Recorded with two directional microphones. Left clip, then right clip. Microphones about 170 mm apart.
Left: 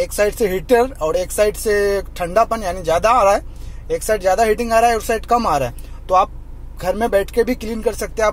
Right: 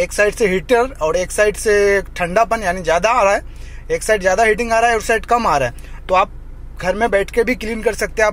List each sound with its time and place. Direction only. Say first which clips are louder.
0.0 s speech: right 2 dB; centre (ahead or behind)